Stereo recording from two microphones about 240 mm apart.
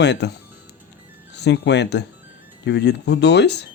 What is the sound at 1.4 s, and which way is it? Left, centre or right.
Speech, left.